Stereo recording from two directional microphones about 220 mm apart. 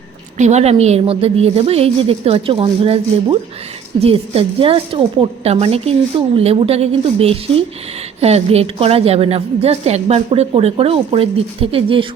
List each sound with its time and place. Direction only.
0.3 s a woman's voice: 30° right (ahead or behind)